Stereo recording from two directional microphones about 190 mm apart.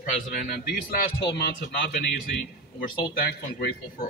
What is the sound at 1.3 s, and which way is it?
Speech, 60° left (ahead or behind).